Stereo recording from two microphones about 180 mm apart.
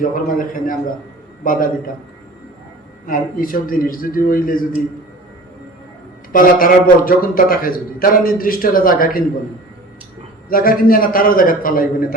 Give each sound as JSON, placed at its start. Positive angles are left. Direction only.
{"t": 0.0, "sound": "a man's voice", "side_deg": 50}
{"t": 3.1, "sound": "a man's voice", "side_deg": 50}
{"t": 6.3, "sound": "a man's voice", "side_deg": 50}
{"t": 10.5, "sound": "a man's voice", "side_deg": 50}